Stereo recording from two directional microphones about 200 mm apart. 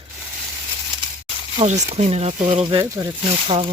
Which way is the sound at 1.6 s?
35° right (ahead or behind).